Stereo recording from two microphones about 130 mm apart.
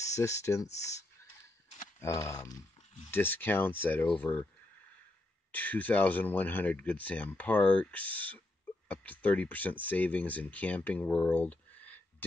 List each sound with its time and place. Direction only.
0.2 s speech: 25° left (ahead or behind)
2.0 s speech: 20° left (ahead or behind)
5.5 s speech: 15° left (ahead or behind)